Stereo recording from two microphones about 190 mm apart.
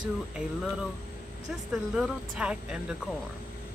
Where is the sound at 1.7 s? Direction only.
5° right (ahead or behind).